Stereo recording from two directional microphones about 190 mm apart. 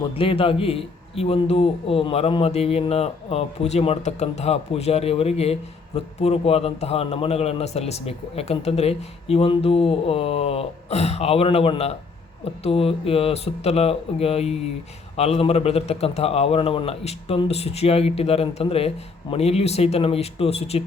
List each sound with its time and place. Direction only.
0.1 s a man's voice: 30° left (ahead or behind)